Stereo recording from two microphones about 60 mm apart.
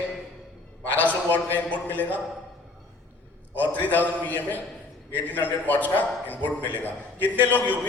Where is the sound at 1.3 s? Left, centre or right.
Left.